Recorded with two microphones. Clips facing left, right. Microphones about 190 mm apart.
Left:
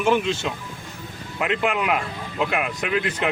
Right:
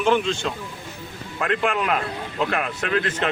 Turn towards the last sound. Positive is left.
turn(degrees=10)  # may be behind; listen again after turning